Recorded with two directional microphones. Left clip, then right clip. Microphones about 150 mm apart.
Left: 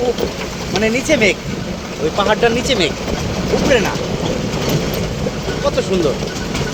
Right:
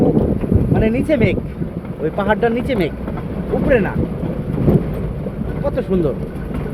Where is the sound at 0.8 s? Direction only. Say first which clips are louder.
Left 4 dB; 30° right (ahead or behind).